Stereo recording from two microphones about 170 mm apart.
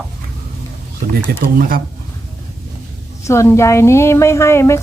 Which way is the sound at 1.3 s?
65° right (ahead or behind).